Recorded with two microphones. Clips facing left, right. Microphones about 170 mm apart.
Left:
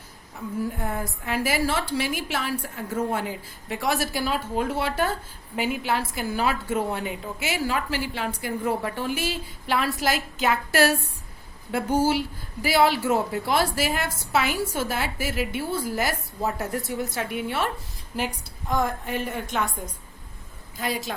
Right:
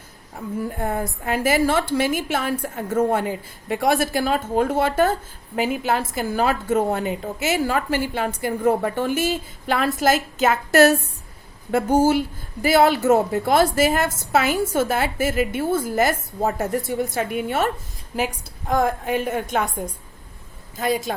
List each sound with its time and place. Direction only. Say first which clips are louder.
0.8 s a woman's voice: right 5 dB; 50° right (ahead or behind)
18.7 s a woman's voice: right 5 dB; 50° right (ahead or behind)
20.7 s a woman's voice: right 6 dB; 50° right (ahead or behind)